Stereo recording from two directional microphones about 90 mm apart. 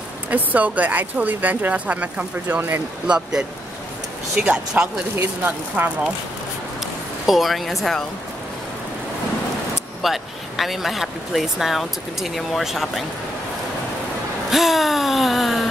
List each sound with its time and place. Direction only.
0.3 s speech: 15° right (ahead or behind)
3.1 s speech: 5° right (ahead or behind)
5.4 s speech: 20° right (ahead or behind)
6.8 s a sound: centre (ahead or behind)
10.0 s speech: centre (ahead or behind)
14.5 s speech: centre (ahead or behind)